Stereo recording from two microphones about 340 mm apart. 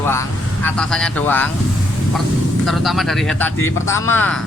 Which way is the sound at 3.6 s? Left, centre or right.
Left.